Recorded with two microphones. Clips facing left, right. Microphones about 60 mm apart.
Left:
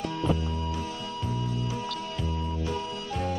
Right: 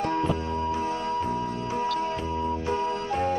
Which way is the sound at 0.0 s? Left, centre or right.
Right.